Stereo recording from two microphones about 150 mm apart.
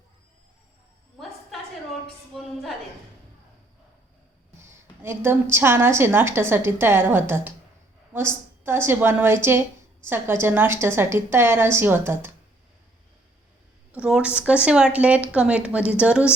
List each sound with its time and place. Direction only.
2.0 s a woman's voice: centre (ahead or behind)
4.6 s a woman's voice: 15° right (ahead or behind)
13.9 s a woman's voice: 5° right (ahead or behind)